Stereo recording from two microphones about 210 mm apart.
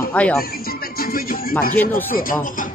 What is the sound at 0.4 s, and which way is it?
Music, 45° left (ahead or behind).